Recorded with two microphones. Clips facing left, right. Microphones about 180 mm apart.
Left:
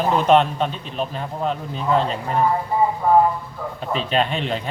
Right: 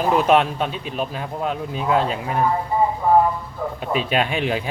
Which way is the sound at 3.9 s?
10° right (ahead or behind).